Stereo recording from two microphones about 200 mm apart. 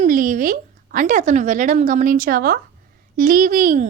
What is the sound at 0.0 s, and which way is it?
A woman's voice, 40° right (ahead or behind).